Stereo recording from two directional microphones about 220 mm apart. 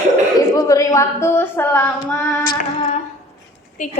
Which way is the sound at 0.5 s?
15° left (ahead or behind).